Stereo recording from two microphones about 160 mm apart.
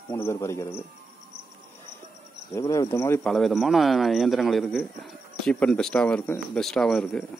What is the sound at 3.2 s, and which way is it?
Speech, centre (ahead or behind).